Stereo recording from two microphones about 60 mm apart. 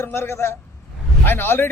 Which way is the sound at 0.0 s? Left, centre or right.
Left.